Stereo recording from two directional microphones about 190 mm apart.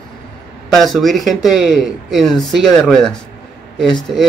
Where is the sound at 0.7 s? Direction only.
Centre (ahead or behind).